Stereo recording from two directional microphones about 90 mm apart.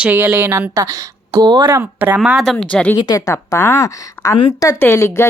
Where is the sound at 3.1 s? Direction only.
40° left (ahead or behind).